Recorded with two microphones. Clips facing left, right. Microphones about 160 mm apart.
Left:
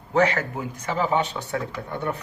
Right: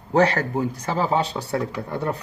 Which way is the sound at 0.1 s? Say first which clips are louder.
Right 2 dB; 35° right (ahead or behind).